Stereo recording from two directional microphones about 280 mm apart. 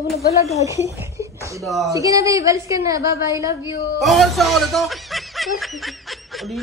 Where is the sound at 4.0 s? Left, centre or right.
Centre.